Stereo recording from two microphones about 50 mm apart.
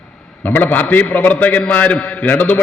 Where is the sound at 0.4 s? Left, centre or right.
Left.